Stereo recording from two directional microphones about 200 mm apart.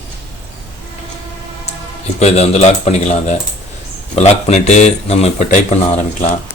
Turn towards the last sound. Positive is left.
turn(degrees=35)  # may be behind; listen again after turning